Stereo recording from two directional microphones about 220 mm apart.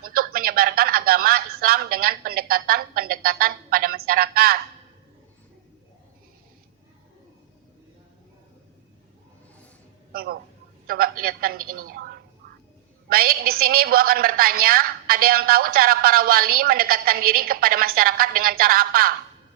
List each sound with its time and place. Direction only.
0.1 s speech: 40° right (ahead or behind)
10.1 s a woman's voice: 45° right (ahead or behind)
13.1 s a woman's voice: 40° right (ahead or behind)